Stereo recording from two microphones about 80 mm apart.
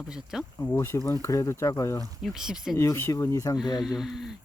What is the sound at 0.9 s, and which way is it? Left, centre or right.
Speech, left.